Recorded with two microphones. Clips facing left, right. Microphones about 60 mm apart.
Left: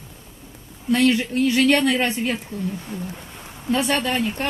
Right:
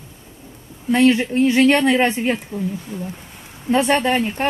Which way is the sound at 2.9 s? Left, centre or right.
Left.